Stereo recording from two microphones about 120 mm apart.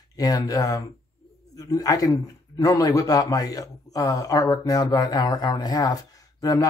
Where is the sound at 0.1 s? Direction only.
30° left (ahead or behind).